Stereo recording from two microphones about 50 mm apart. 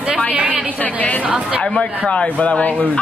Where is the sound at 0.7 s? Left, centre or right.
Left.